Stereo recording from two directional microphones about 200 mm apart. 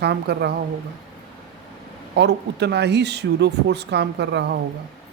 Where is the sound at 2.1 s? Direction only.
55° right (ahead or behind).